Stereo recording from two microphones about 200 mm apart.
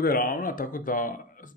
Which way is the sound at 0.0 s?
45° left (ahead or behind).